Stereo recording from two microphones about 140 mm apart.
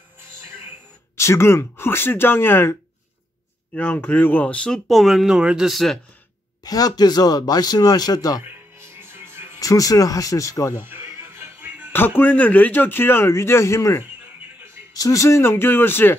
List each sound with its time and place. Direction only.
1.1 s speech: 20° left (ahead or behind); by 5.9 s centre (ahead or behind)
6.6 s speech: 25° left (ahead or behind)
8.5 s music: 15° right (ahead or behind)
9.6 s speech: 25° left (ahead or behind)
10.9 s music: 15° right (ahead or behind)
12.2 s speech: 10° left (ahead or behind)